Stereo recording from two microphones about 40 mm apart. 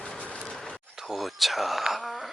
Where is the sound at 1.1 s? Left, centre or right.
Centre.